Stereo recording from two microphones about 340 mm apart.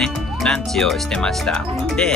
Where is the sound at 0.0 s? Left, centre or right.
Centre.